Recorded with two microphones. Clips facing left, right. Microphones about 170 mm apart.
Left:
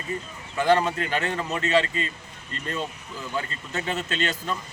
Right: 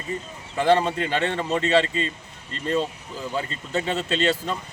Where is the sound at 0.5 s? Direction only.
30° right (ahead or behind).